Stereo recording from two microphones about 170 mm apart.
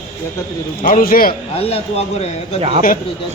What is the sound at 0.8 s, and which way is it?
Speech, 55° left (ahead or behind).